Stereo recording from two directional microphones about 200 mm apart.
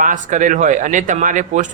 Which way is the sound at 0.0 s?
40° right (ahead or behind).